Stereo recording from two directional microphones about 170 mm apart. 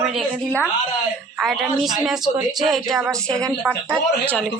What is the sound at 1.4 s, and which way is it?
A woman's voice, centre (ahead or behind).